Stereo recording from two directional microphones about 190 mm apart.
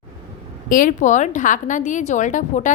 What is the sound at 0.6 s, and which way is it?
A woman's voice, 45° left (ahead or behind).